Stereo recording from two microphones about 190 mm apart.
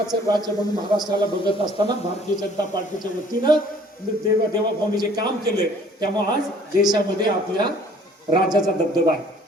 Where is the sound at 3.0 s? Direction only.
25° right (ahead or behind).